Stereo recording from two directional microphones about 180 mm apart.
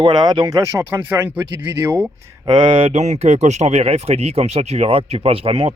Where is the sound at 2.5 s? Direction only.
25° right (ahead or behind).